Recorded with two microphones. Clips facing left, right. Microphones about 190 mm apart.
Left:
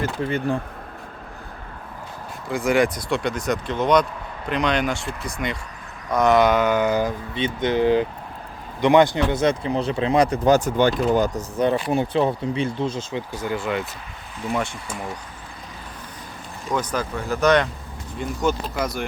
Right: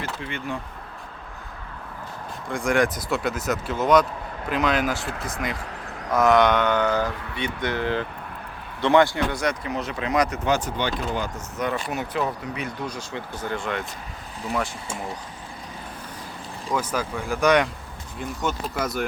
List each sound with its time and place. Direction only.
0.0 s speech: 40° left (ahead or behind)
2.5 s speech: 5° left (ahead or behind)
7.3 s speech: 20° left (ahead or behind); by 14.7 s centre (ahead or behind)
16.7 s speech: 5° right (ahead or behind)
18.2 s speech: centre (ahead or behind)